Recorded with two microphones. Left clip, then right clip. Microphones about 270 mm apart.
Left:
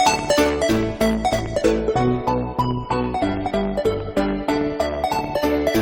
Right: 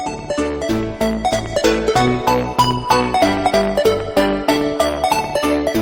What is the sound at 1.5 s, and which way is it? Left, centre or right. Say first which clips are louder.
Music: right 4 dB; right.